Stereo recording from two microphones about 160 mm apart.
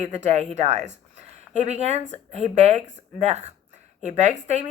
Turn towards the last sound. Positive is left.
turn(degrees=-45)  # may be behind; listen again after turning